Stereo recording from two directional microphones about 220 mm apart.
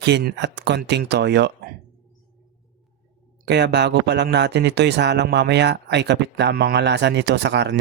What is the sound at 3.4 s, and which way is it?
A man's voice, 50° right (ahead or behind).